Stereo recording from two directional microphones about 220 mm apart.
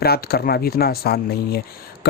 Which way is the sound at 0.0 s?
45° left (ahead or behind).